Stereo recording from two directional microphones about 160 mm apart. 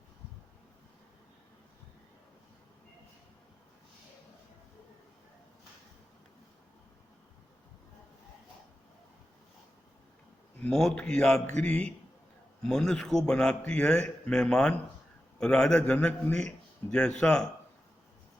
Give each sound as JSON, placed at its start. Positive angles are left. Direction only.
{"t": 10.6, "sound": "a man's voice", "side_deg": 5}
{"t": 17.2, "sound": "a man's voice", "side_deg": 5}